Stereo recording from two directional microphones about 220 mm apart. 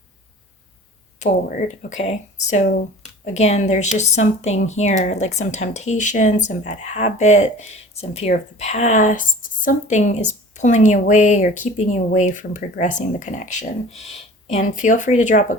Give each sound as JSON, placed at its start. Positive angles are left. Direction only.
{"t": 1.2, "sound": "speech", "side_deg": 35}